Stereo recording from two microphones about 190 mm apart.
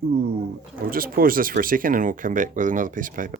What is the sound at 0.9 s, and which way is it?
Speech, 50° right (ahead or behind).